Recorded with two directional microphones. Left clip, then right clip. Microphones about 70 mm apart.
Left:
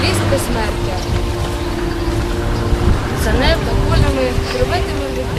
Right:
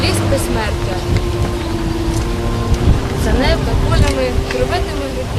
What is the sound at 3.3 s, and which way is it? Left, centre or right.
Speech, centre.